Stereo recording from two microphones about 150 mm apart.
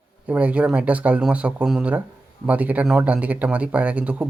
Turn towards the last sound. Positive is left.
turn(degrees=-10)  # may be behind; listen again after turning